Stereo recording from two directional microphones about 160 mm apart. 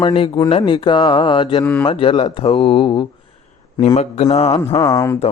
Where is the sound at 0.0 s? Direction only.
30° left (ahead or behind).